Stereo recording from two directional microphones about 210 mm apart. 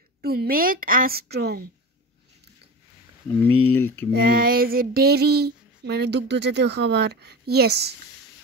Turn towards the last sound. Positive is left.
turn(degrees=-50)  # may be behind; listen again after turning